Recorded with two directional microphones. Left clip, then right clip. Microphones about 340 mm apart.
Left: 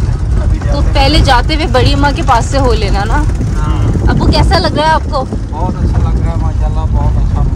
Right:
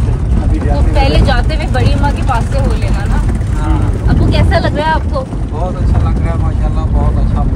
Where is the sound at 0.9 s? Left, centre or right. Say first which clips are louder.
Left 5 dB; left.